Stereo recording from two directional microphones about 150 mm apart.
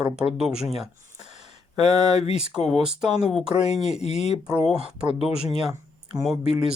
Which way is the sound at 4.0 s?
45° left (ahead or behind).